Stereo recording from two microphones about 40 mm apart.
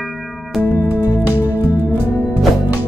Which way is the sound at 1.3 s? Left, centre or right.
Right.